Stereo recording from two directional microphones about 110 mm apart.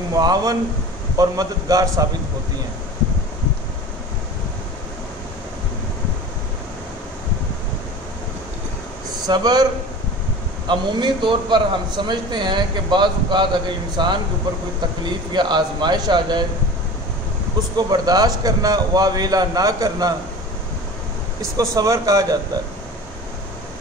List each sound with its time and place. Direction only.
0.1 s a man's voice: 35° right (ahead or behind)
9.2 s a man's voice: 35° right (ahead or behind)
10.7 s a man's voice: 45° right (ahead or behind)
17.7 s a man's voice: 35° right (ahead or behind)
21.4 s a man's voice: 30° right (ahead or behind)